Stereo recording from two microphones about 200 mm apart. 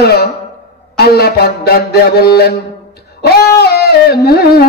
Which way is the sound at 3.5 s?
55° left (ahead or behind).